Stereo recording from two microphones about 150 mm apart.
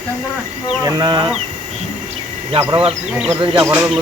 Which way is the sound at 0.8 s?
25° right (ahead or behind).